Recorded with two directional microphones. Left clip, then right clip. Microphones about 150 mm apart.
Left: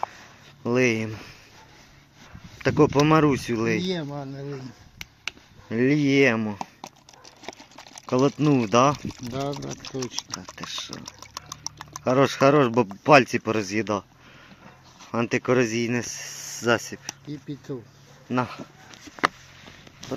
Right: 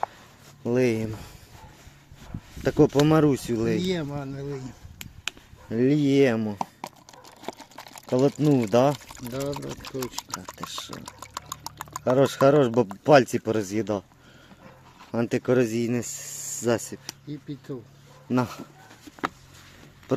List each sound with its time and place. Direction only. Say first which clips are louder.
0.6 s speech: left 1 dB; centre (ahead or behind)
2.6 s speech: left 1 dB; 5° right (ahead or behind)
3.8 s speech: even; 15° left (ahead or behind)
5.6 s speech: left 1 dB; centre (ahead or behind)
7.4 s a sound: right 2 dB; 10° right (ahead or behind)
9.3 s speech: left 1 dB; 45° left (ahead or behind)
9.6 s speech: even; 25° right (ahead or behind)
10.6 s speech: left 2 dB; 10° right (ahead or behind)
11.0 s liquid: right 1 dB; 20° right (ahead or behind)
12.1 s speech: even; 5° right (ahead or behind)
15.1 s speech: left 1 dB; 5° right (ahead or behind)
17.1 s speech: left 2 dB; 90° left